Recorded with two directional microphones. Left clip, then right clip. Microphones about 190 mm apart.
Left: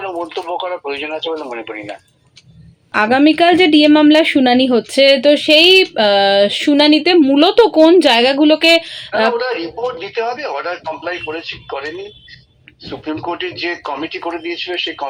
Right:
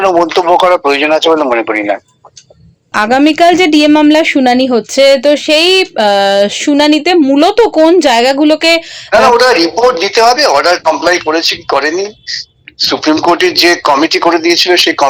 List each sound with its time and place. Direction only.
0.0 s a woman's voice: 45° right (ahead or behind); by 9.3 s 25° right (ahead or behind)
9.4 s speech: 45° right (ahead or behind)